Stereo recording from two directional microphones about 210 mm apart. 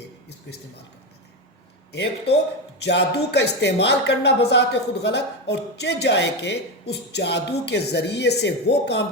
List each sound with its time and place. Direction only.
1.9 s speech: 55° left (ahead or behind)